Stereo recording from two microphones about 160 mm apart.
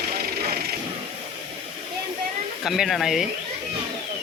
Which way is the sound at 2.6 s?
Centre (ahead or behind).